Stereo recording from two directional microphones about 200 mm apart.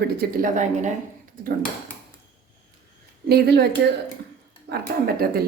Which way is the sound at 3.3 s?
55° right (ahead or behind).